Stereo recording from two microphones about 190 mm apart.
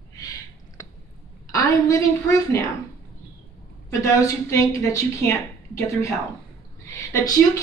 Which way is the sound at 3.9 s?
15° left (ahead or behind).